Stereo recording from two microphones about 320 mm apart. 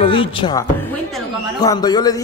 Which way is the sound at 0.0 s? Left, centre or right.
Centre.